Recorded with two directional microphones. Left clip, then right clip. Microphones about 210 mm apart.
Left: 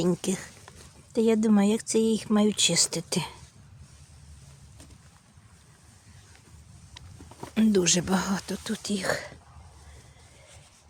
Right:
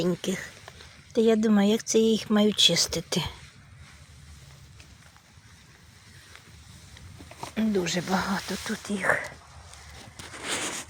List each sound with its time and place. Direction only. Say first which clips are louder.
0.0 s speech: even; 20° left (ahead or behind)
7.5 s speech: left 4 dB; 45° left (ahead or behind); by 9.3 s 20° left (ahead or behind)